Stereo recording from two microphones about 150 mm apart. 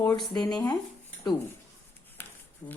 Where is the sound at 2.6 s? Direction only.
10° left (ahead or behind).